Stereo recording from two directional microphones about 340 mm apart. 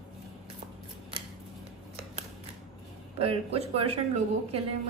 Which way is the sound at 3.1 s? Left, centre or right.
Centre.